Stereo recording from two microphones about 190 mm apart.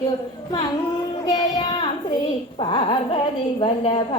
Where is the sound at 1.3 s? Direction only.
25° left (ahead or behind).